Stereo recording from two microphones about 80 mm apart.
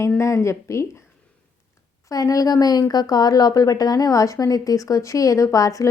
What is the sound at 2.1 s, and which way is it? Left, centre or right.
A woman's voice, left.